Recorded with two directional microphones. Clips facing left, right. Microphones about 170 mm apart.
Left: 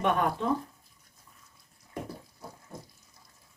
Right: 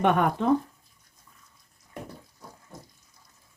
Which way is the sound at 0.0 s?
65° right (ahead or behind).